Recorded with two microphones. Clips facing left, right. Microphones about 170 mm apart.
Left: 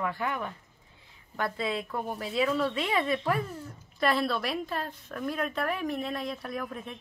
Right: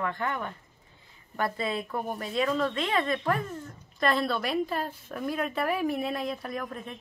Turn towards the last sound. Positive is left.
turn(degrees=5)  # may be behind; listen again after turning